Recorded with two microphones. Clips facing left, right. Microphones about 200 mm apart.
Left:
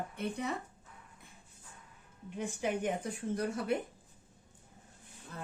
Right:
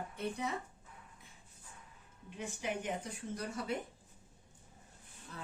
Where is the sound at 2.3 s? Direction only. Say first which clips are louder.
Left 5 dB; 50° left (ahead or behind).